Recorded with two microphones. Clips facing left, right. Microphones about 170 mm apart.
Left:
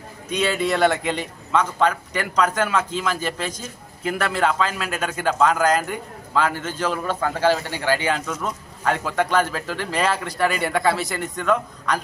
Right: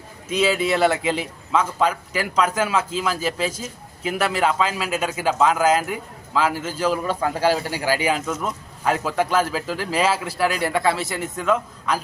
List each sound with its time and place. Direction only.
0.3 s speech: 5° right (ahead or behind)